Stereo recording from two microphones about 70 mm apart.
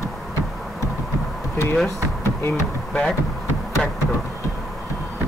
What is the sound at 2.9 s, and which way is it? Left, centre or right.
Speech, centre.